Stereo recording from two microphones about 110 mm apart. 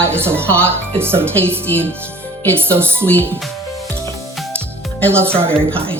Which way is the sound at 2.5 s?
20° right (ahead or behind).